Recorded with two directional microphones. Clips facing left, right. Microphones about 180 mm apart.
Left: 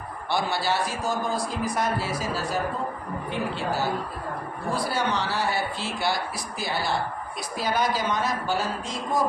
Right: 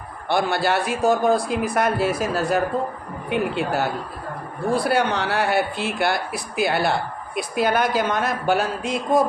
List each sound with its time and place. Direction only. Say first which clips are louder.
0.3 s a man's voice: right 5 dB; 55° right (ahead or behind)